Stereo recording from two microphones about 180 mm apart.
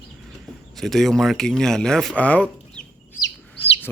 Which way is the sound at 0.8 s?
Centre (ahead or behind).